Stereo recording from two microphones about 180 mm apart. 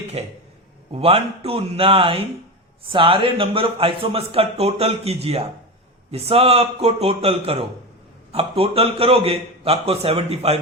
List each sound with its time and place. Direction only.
0.2 s speech: 35° right (ahead or behind)